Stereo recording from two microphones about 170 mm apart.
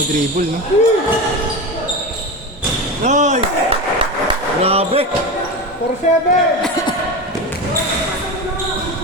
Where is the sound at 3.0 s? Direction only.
45° right (ahead or behind).